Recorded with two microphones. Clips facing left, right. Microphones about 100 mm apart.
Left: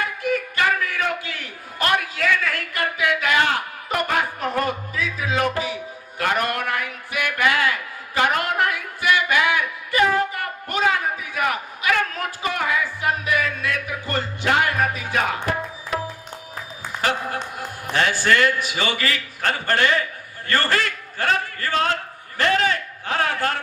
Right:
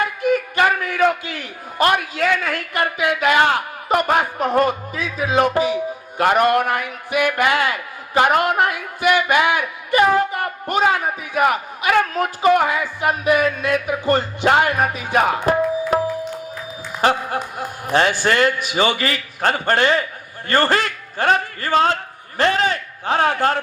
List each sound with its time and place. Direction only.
0.2 s a man's voice: 20° right (ahead or behind)
14.4 s tabla: 25° right (ahead or behind)
17.9 s a man's voice: 20° right (ahead or behind)